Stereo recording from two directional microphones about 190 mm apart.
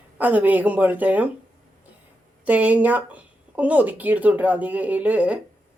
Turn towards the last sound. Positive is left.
turn(degrees=-5)  # may be behind; listen again after turning